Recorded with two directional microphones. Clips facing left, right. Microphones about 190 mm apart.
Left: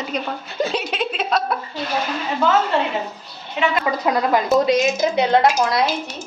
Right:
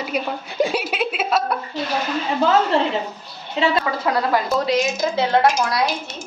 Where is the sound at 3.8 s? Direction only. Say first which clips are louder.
Left 2 dB; 15° left (ahead or behind).